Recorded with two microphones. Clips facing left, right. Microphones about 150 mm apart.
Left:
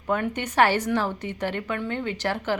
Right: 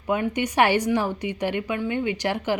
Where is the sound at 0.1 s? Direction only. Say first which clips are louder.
Right 2 dB; 10° right (ahead or behind).